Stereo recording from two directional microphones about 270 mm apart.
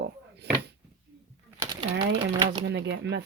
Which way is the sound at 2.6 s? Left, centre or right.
Right.